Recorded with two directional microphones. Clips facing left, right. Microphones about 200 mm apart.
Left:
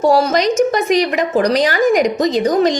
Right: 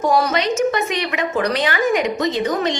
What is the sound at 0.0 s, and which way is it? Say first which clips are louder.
A woman's voice: left 5 dB; 30° left (ahead or behind).